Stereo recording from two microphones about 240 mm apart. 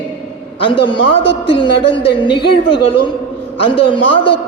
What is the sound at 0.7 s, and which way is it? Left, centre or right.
A man's voice, left.